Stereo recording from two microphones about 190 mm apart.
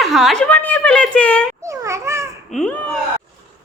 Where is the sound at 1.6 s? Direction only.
15° right (ahead or behind).